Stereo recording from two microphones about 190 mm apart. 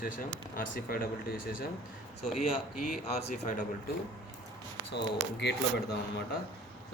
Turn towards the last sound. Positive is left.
turn(degrees=60)  # may be behind; listen again after turning